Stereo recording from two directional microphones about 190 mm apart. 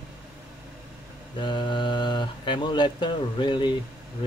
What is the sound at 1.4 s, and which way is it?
Speech, 25° left (ahead or behind).